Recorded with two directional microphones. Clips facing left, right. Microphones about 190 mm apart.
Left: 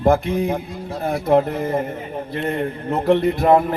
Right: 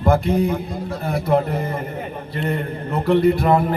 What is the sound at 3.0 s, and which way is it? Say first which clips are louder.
Speech: right 1 dB; 40° left (ahead or behind).